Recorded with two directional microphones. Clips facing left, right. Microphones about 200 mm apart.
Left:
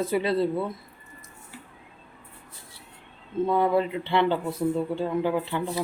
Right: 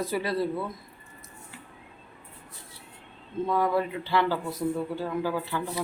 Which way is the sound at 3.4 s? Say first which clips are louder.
Left 3 dB; 25° left (ahead or behind).